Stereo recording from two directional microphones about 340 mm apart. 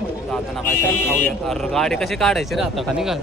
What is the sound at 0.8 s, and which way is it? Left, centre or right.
Speech, centre.